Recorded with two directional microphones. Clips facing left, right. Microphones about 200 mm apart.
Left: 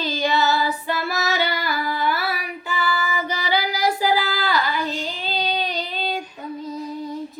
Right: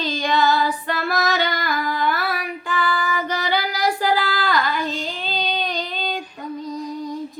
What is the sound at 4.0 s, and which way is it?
Child singing, 10° left (ahead or behind).